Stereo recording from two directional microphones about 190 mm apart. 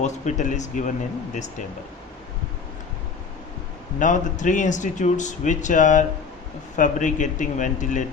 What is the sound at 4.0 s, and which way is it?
Speech, 40° left (ahead or behind).